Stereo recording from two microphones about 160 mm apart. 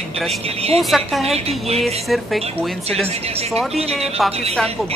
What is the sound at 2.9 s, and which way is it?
Speech, 40° right (ahead or behind).